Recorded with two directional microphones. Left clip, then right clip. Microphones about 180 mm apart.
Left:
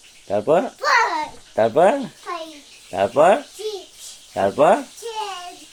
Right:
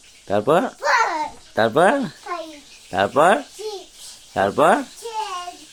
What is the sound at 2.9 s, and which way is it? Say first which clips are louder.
Speech: left 1 dB; 45° right (ahead or behind).